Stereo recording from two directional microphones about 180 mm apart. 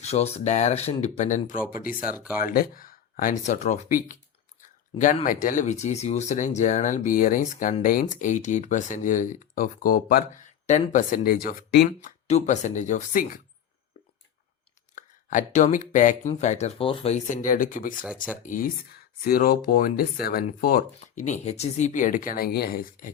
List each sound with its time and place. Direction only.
0.0 s speech: 35° left (ahead or behind); by 2.1 s 50° left (ahead or behind)
2.1 s speech: 10° right (ahead or behind)
2.4 s speech: 55° left (ahead or behind)
11.9 s speech: 45° left (ahead or behind)
14.9 s speech: 45° left (ahead or behind)
21.0 s speech: 40° left (ahead or behind)